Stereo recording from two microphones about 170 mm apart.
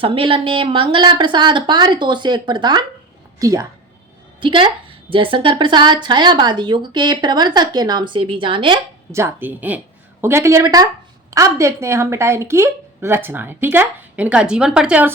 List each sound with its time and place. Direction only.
0.0 s a woman's voice: 30° right (ahead or behind)
9.1 s a woman's voice: 15° right (ahead or behind)